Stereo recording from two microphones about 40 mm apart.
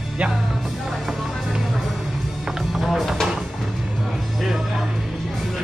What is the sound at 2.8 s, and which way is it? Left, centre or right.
Music, centre.